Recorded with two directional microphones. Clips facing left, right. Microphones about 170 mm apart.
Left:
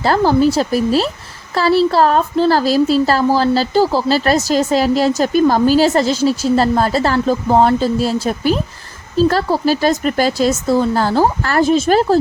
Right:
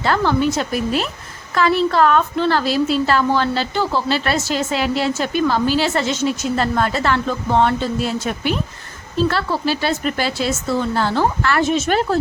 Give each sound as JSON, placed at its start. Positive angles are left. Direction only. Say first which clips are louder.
{"t": 0.0, "sound": "a woman's voice", "louder": "left 5 dB", "side_deg": 35}